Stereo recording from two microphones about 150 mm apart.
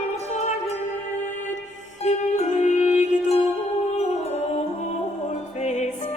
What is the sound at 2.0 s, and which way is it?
Music, 50° left (ahead or behind).